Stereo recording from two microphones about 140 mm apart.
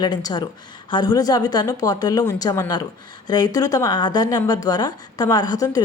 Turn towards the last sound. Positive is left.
turn(degrees=25)  # may be behind; listen again after turning